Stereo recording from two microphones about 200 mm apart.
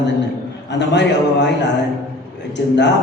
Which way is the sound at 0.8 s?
60° left (ahead or behind).